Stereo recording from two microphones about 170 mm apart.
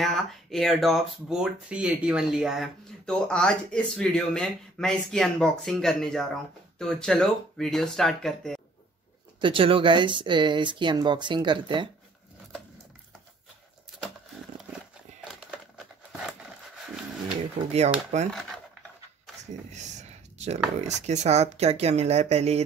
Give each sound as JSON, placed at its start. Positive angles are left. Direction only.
{"t": 0.0, "sound": "speech", "side_deg": 0}
{"t": 9.4, "sound": "speech", "side_deg": -30}
{"t": 17.6, "sound": "speech", "side_deg": -40}
{"t": 18.3, "sound": "a sound", "side_deg": 0}
{"t": 19.7, "sound": "a sound", "side_deg": -45}
{"t": 21.0, "sound": "speech", "side_deg": -40}